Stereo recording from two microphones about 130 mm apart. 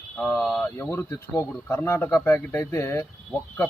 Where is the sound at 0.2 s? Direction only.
5° left (ahead or behind).